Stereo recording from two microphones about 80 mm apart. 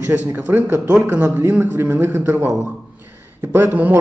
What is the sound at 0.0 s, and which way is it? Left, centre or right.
A man's voice, right.